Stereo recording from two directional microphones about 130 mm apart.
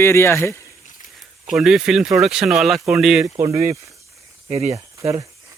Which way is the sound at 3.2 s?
25° right (ahead or behind).